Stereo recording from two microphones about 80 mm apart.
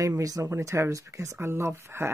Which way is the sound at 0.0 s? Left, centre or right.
Right.